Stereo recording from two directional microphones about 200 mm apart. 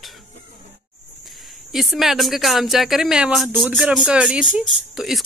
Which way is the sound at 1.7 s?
Centre (ahead or behind).